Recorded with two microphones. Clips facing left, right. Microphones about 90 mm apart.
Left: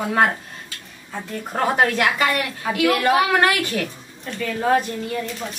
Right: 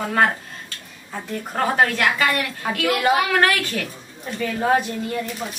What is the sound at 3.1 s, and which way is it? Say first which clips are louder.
Speech: left 1 dB; 15° left (ahead or behind).